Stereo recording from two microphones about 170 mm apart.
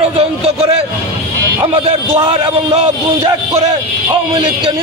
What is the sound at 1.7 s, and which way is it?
A man's voice, 35° right (ahead or behind).